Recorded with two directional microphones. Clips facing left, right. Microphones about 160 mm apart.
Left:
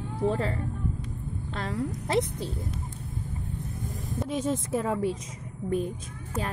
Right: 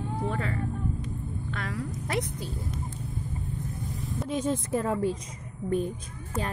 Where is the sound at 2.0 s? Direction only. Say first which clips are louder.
Left 5 dB; 25° left (ahead or behind).